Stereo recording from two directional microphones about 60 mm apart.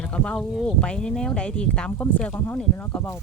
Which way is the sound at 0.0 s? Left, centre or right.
Centre.